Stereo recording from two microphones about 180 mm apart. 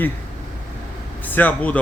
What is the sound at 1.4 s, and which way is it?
Speech, 10° left (ahead or behind).